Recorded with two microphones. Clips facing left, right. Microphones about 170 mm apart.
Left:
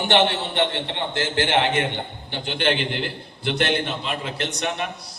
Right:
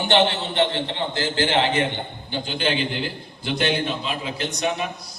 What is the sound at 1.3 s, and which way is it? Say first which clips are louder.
A man's voice: left 1 dB; 65° left (ahead or behind).